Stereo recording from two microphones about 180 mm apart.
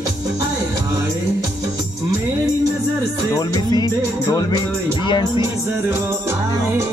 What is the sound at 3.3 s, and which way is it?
Music, 20° left (ahead or behind).